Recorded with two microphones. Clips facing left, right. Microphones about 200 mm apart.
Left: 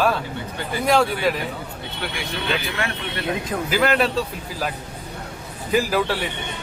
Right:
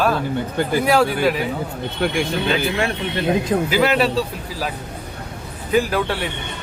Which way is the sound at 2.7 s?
25° right (ahead or behind).